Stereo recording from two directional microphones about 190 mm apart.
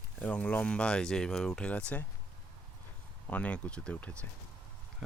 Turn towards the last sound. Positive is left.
turn(degrees=5)  # may be behind; listen again after turning